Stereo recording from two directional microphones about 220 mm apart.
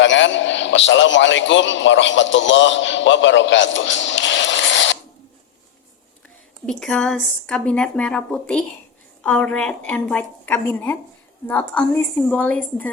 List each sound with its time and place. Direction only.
0.0 s a man's voice: 55° left (ahead or behind)
6.7 s a woman's voice: centre (ahead or behind)